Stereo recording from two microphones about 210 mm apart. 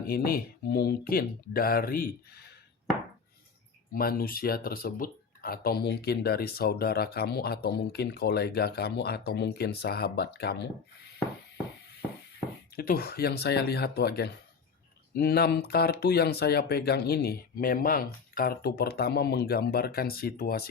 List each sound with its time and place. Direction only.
0.1 s speech: 45° left (ahead or behind)
3.9 s speech: 45° left (ahead or behind)
12.7 s speech: 45° left (ahead or behind)